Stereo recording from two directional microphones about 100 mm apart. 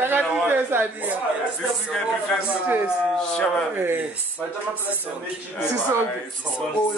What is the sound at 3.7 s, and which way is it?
Speech, 20° right (ahead or behind).